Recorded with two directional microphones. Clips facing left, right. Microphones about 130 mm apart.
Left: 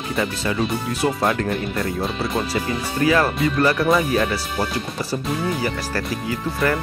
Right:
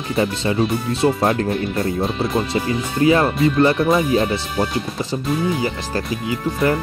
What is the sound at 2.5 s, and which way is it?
Speech, 25° right (ahead or behind).